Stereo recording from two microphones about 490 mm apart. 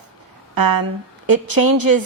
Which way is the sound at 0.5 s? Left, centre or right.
Right.